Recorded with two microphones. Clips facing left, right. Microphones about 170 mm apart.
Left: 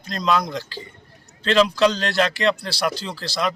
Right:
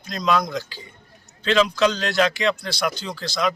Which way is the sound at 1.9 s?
35° left (ahead or behind).